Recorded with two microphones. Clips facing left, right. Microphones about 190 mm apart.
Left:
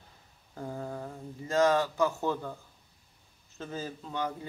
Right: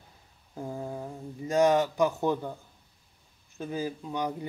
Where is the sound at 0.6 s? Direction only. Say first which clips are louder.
Right 2 dB; 15° right (ahead or behind).